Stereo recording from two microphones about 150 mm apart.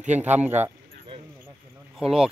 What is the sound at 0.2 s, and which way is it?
Speech, 10° right (ahead or behind).